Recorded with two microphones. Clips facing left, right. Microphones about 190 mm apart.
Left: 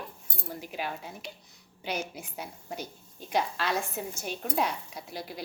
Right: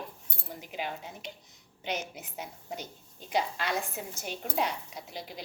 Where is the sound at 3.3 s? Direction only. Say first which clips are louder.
Left 1 dB; 15° right (ahead or behind).